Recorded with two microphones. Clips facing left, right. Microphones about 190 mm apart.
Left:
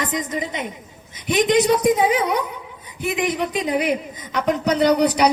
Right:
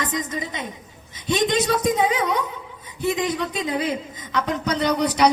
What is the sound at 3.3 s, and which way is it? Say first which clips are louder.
Speech: left 3 dB; 20° left (ahead or behind).